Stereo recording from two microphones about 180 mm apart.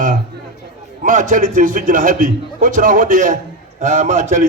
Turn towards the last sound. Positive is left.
turn(degrees=-45)  # may be behind; listen again after turning